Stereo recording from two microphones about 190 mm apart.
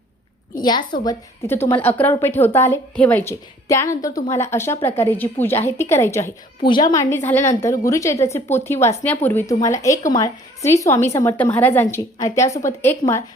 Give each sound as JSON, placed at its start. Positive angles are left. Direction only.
{"t": 0.6, "sound": "a woman's voice", "side_deg": 25}
{"t": 7.0, "sound": "speech", "side_deg": 10}